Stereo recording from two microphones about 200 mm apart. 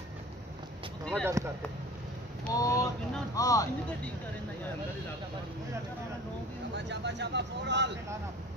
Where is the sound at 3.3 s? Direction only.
15° left (ahead or behind).